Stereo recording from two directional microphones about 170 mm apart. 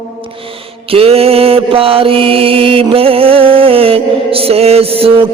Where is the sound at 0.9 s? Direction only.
35° right (ahead or behind).